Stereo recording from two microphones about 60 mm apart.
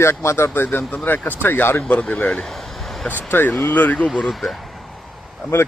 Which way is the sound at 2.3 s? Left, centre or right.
Centre.